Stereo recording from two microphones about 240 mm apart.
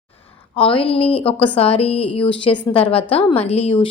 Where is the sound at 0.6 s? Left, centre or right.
Left.